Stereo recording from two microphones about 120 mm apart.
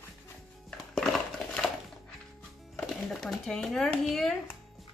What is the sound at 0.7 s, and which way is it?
Crushing, 5° left (ahead or behind).